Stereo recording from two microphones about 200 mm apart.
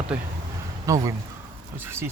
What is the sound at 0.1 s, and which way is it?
Speech, 5° right (ahead or behind).